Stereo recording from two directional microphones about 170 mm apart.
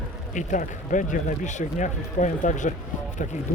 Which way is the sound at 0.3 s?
50° left (ahead or behind).